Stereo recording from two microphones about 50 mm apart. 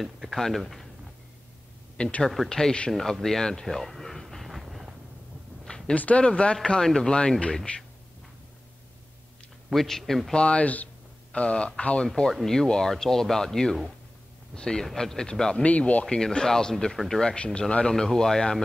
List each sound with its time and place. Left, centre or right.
0.0 s a sound: centre
0.4 s speech: centre
2.0 s speech: centre
2.9 s a sound: centre
5.9 s speech: left
9.7 s speech: centre
10.3 s speech: left
15.6 s speech: left
16.2 s speech: centre